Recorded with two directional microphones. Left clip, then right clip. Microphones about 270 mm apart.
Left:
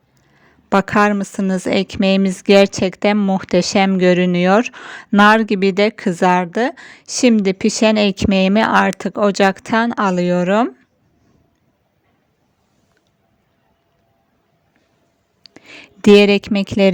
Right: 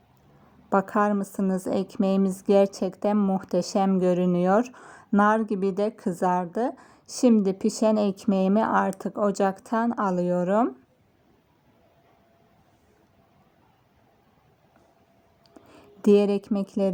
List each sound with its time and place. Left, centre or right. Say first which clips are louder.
0.8 s a woman's voice: left 9 dB; left
1.4 s speech: left 7 dB; left
1.6 s a woman's voice: left 12 dB; left
4.9 s speech: left 10 dB; left
5.4 s a woman's voice: left 11 dB; left
15.4 s a sound: left 12 dB; left